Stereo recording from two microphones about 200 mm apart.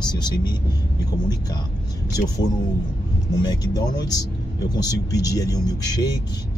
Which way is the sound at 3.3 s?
20° left (ahead or behind).